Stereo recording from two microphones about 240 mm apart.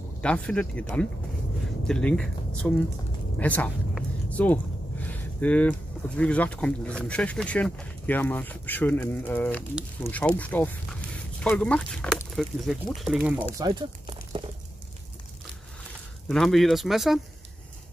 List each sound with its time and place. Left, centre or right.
0.2 s speech: centre
13.4 s speech: centre
16.3 s speech: centre